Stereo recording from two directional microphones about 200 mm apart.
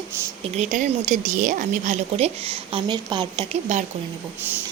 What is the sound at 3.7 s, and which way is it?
Speech, 35° right (ahead or behind).